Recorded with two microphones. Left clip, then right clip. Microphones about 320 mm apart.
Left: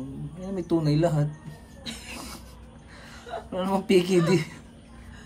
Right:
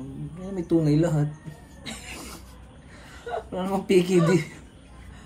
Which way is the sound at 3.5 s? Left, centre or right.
Centre.